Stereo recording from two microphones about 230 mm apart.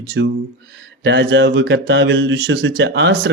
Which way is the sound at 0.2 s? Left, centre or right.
Right.